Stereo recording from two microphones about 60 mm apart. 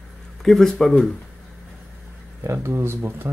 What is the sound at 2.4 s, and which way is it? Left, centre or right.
Speech, right.